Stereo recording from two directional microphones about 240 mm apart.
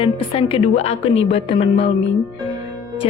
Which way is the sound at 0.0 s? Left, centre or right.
Left.